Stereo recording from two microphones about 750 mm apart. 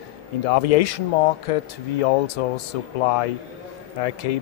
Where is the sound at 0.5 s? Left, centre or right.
Left.